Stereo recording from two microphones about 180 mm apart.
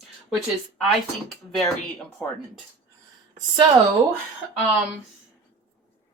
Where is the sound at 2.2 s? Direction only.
5° left (ahead or behind).